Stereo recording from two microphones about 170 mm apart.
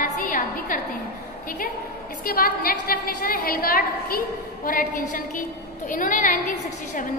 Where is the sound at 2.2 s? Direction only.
60° left (ahead or behind).